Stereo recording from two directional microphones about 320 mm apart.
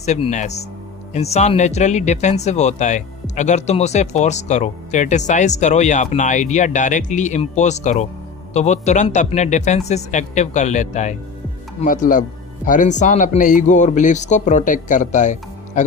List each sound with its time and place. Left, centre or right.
0.0 s speech: left